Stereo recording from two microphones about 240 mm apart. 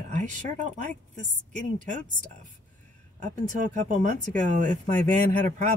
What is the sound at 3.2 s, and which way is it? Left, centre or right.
Speech, right.